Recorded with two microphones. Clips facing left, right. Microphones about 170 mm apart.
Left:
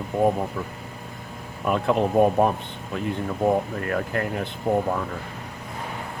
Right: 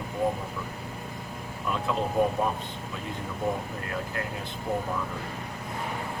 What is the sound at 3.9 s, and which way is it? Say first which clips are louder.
Speech: left 8 dB; 60° left (ahead or behind).